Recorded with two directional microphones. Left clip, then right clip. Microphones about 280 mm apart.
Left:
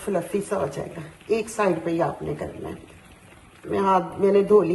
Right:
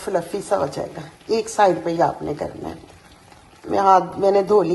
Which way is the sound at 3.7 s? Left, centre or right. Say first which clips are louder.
Right 6 dB; right.